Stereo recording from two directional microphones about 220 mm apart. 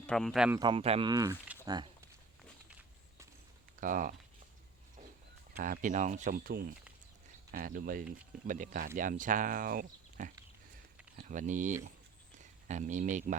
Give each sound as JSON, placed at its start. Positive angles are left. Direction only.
{"t": 0.0, "sound": "speech", "side_deg": 5}
{"t": 0.6, "sound": "speech", "side_deg": -25}
{"t": 2.6, "sound": "walk", "side_deg": -5}
{"t": 3.8, "sound": "speech", "side_deg": -40}
{"t": 5.5, "sound": "speech", "side_deg": -40}